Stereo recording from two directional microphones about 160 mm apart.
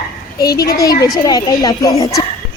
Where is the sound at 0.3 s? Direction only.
25° left (ahead or behind).